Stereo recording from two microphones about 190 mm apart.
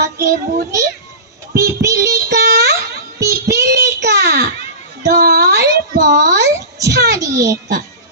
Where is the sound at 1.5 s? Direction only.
15° right (ahead or behind).